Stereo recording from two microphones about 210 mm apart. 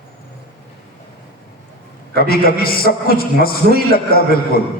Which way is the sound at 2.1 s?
45° left (ahead or behind).